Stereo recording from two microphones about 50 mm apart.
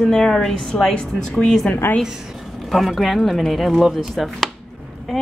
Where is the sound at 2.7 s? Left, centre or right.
Centre.